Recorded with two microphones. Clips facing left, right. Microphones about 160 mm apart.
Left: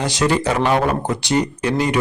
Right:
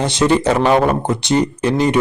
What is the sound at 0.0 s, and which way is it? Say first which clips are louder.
A man's voice: right 4 dB; 25° right (ahead or behind).